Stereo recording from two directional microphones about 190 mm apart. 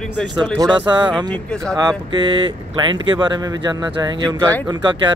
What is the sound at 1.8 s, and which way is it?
Speech, 20° right (ahead or behind).